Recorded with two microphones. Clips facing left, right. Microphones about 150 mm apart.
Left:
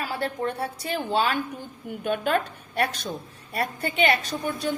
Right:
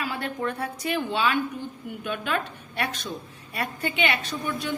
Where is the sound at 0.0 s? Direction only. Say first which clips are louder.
Left 1 dB; 35° left (ahead or behind).